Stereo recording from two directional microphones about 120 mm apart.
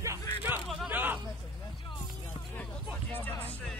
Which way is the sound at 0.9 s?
15° right (ahead or behind).